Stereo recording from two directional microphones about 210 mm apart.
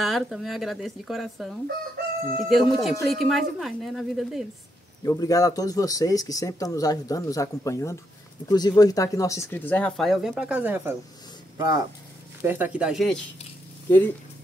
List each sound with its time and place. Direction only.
0.0 s speech: centre (ahead or behind)
5.0 s speech: 15° left (ahead or behind)